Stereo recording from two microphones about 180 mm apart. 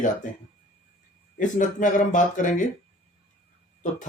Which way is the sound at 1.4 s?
45° left (ahead or behind).